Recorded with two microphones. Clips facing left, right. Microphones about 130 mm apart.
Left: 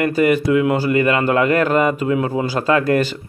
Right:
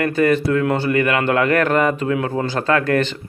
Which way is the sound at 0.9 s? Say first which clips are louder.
Left 1 dB; 25° left (ahead or behind).